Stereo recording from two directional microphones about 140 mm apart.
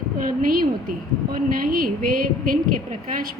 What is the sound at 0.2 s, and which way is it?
A woman's voice, 85° right.